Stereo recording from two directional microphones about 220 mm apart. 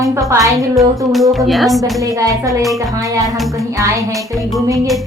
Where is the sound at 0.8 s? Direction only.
Centre (ahead or behind).